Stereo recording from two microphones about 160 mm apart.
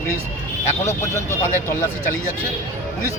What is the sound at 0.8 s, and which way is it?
Speech, 15° left (ahead or behind).